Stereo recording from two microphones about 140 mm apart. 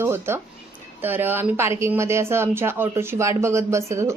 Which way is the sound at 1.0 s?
15° right (ahead or behind).